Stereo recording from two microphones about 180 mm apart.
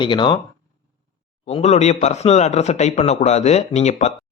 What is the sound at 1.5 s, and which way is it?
Speech, 35° left (ahead or behind).